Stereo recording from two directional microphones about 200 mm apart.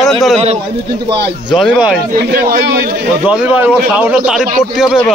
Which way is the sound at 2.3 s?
45° right (ahead or behind).